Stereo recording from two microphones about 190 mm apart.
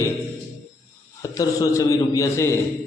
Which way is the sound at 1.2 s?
20° left (ahead or behind).